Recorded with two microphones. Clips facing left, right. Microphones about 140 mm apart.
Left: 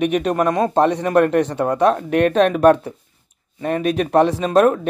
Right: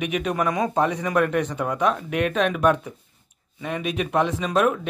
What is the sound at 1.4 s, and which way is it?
Speech, 35° left (ahead or behind).